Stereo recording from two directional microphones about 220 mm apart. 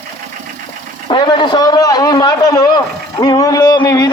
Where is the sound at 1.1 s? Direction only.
20° left (ahead or behind).